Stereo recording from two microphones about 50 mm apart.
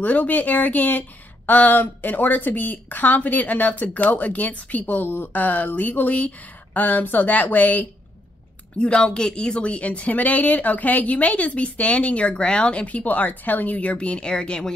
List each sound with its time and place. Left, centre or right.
0.0 s a woman's voice: left
8.7 s speech: left